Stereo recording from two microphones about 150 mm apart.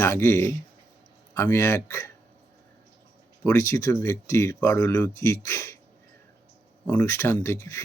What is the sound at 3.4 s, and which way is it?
Speech, 20° left (ahead or behind).